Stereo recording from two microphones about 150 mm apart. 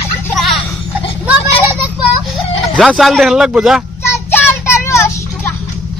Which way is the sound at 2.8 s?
Centre (ahead or behind).